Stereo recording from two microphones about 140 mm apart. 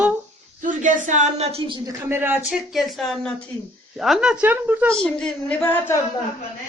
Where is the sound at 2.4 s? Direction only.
Centre (ahead or behind).